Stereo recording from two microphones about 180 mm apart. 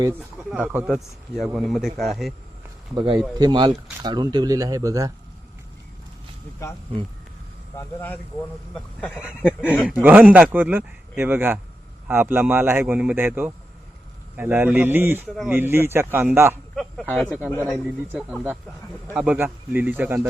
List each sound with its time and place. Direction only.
0.1 s speech: 10° right (ahead or behind)
2.9 s speech: 25° right (ahead or behind)
7.8 s speech: 10° left (ahead or behind)
9.1 s speech: 5° right (ahead or behind)
16.7 s speech: centre (ahead or behind)